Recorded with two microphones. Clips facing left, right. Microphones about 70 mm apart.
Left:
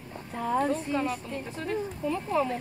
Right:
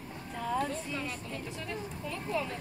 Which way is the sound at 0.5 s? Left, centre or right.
Left.